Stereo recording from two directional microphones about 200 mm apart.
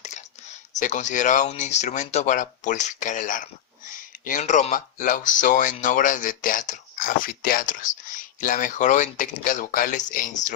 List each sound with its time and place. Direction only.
0.8 s speech: 40° left (ahead or behind)